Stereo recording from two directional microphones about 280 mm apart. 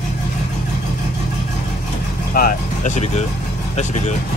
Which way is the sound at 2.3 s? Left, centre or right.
Left.